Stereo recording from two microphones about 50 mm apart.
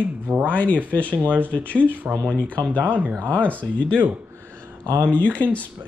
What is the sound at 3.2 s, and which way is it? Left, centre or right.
Speech, left.